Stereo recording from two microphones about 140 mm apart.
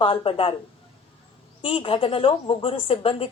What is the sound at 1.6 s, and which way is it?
Speech, 40° left (ahead or behind).